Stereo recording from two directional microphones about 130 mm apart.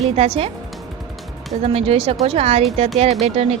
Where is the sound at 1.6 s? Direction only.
50° right (ahead or behind).